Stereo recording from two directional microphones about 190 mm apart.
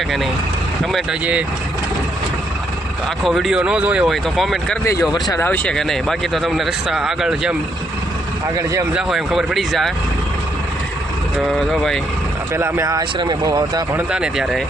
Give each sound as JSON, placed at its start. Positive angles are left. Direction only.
{"t": 0.9, "sound": "speech", "side_deg": -5}
{"t": 3.2, "sound": "speech", "side_deg": 0}
{"t": 5.3, "sound": "speech", "side_deg": 10}
{"t": 8.9, "sound": "speech", "side_deg": -5}
{"t": 11.3, "sound": "speech", "side_deg": 0}
{"t": 12.5, "sound": "speech", "side_deg": -15}
{"t": 14.1, "sound": "speech", "side_deg": -5}